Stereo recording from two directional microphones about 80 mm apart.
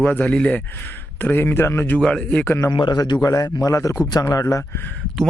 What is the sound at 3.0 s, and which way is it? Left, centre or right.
A man's voice, left.